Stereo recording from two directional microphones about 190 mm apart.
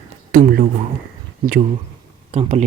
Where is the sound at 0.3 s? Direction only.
50° right (ahead or behind).